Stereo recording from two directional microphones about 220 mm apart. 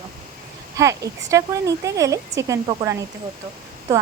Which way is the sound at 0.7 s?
15° right (ahead or behind).